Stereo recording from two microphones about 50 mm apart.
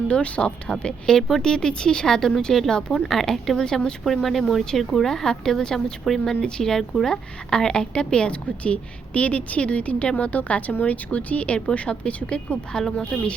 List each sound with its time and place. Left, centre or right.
0.1 s a woman's voice: left
1.0 s speech: centre
3.6 s speech: centre
4.0 s a woman's voice: centre